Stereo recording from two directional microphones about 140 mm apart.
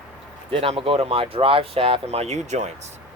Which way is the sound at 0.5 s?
40° right (ahead or behind).